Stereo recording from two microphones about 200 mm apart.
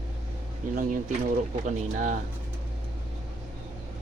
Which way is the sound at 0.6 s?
40° right (ahead or behind).